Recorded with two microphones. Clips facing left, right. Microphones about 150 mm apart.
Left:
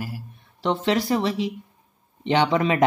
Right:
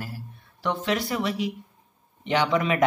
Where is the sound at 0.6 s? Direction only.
25° left (ahead or behind).